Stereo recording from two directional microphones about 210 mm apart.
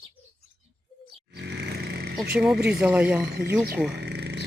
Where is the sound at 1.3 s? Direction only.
55° right (ahead or behind).